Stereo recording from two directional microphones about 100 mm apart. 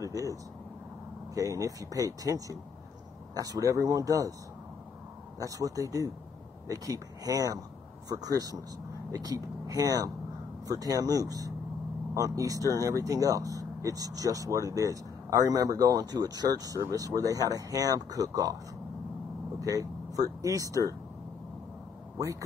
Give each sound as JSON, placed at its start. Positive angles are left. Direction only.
{"t": 0.0, "sound": "speech", "side_deg": -35}
{"t": 5.4, "sound": "speech", "side_deg": -35}
{"t": 19.6, "sound": "speech", "side_deg": -35}